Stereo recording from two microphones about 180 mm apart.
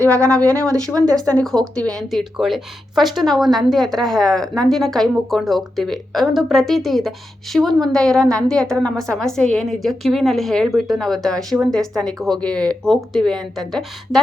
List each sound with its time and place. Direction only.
0.0 s speech: 15° right (ahead or behind)
0.3 s a woman's voice: 5° left (ahead or behind)